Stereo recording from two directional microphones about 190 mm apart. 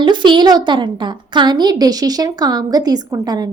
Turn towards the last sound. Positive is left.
turn(degrees=-20)  # may be behind; listen again after turning